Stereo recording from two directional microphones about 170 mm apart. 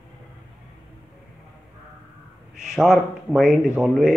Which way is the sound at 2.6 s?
Centre (ahead or behind).